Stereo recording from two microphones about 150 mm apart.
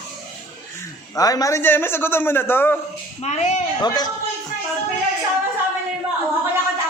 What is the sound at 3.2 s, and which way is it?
Speech, 50° left (ahead or behind).